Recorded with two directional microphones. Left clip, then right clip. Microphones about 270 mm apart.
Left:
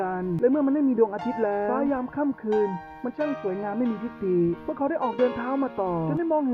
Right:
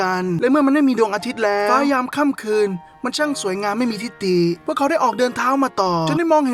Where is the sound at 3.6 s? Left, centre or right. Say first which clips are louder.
Right 7 dB; right.